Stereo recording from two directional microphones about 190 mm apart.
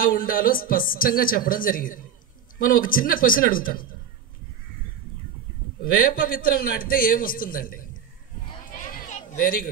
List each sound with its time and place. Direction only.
0.0 s a man's voice: 50° left (ahead or behind)
5.8 s a man's voice: 50° left (ahead or behind)
8.9 s a sound: 40° left (ahead or behind)